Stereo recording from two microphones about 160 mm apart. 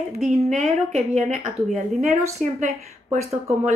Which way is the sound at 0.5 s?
45° right (ahead or behind).